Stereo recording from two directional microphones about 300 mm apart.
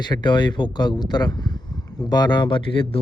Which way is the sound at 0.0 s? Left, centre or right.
Centre.